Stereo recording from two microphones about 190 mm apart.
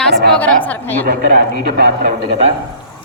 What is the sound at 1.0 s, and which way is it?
Speech, 50° right (ahead or behind).